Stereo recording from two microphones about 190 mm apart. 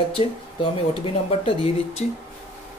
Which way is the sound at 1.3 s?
30° left (ahead or behind).